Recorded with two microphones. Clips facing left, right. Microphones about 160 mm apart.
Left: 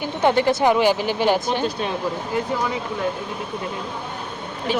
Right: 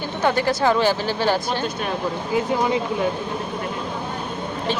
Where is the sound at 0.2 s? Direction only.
20° left (ahead or behind).